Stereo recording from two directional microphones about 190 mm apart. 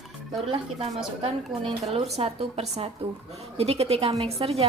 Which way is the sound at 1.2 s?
30° right (ahead or behind).